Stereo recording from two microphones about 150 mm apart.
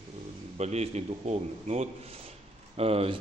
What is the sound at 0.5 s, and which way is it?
A man's voice, 50° right (ahead or behind).